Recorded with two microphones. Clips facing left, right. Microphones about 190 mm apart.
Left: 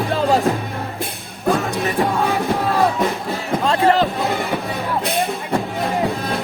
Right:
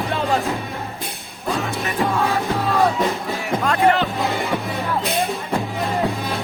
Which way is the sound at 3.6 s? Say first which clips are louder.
Left 2 dB; 35° left (ahead or behind).